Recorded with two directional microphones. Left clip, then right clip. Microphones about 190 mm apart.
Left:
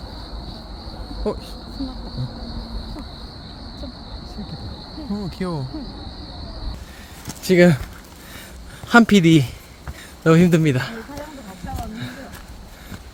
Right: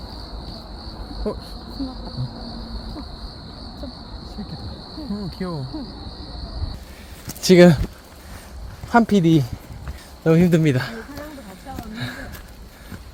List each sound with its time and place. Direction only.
1.2 s speech: 10° left (ahead or behind)
5.1 s speech: 10° left (ahead or behind)
7.4 s speech: 20° right (ahead or behind)
8.9 s speech: 15° left (ahead or behind)
10.6 s speech: 10° right (ahead or behind)
11.9 s a sound: 25° right (ahead or behind)